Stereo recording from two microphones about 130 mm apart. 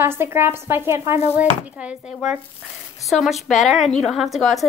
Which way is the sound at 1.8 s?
10° right (ahead or behind).